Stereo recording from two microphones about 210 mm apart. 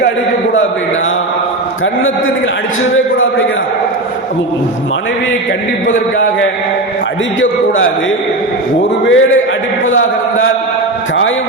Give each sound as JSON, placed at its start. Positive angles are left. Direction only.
{"t": 9.0, "sound": "a man's voice", "side_deg": 65}